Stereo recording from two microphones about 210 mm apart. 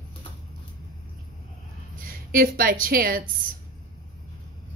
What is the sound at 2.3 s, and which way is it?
A woman's voice, 45° right (ahead or behind).